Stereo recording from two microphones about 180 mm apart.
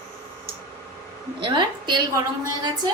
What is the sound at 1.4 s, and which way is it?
Speech, 25° right (ahead or behind).